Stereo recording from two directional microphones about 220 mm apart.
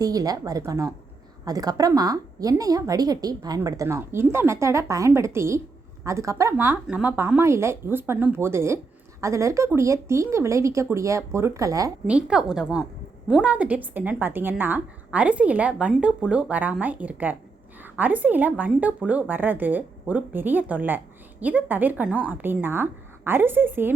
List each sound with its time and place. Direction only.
0.0 s a woman's voice: 15° right (ahead or behind)